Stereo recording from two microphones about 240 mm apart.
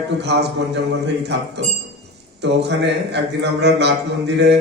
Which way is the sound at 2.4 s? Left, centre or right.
Right.